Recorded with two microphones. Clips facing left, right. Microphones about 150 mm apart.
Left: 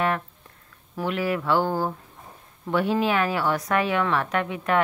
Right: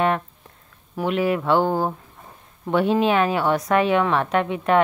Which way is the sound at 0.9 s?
20° right (ahead or behind).